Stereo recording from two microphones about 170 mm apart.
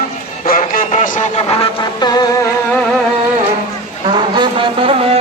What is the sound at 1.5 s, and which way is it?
Music, 30° left (ahead or behind).